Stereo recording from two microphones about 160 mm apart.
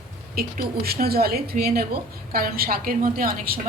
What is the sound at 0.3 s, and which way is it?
A woman's voice, 70° right (ahead or behind).